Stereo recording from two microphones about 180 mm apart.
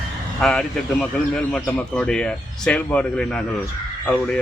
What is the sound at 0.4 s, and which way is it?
Speech, 5° left (ahead or behind).